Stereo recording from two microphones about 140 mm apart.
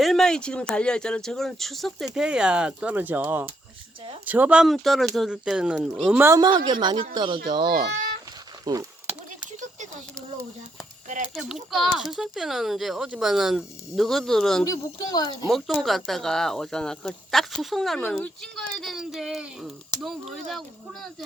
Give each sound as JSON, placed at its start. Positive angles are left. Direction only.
{"t": 0.0, "sound": "speech", "side_deg": 5}
{"t": 6.2, "sound": "speech", "side_deg": -25}
{"t": 11.3, "sound": "speech", "side_deg": 0}
{"t": 14.6, "sound": "speech", "side_deg": 25}
{"t": 15.4, "sound": "speech", "side_deg": 0}